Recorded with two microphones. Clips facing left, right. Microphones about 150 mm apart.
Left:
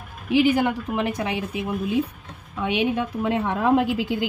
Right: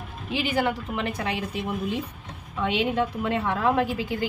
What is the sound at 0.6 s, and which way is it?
A woman's voice, 15° left (ahead or behind).